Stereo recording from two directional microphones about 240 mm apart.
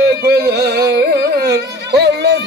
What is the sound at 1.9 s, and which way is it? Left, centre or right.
Music, right.